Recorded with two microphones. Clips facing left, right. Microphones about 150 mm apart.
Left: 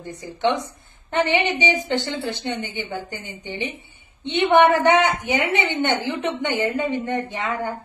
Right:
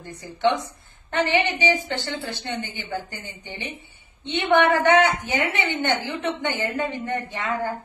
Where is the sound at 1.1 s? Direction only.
20° left (ahead or behind).